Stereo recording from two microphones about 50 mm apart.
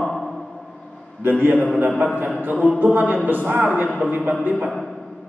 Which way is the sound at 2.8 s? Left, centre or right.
Right.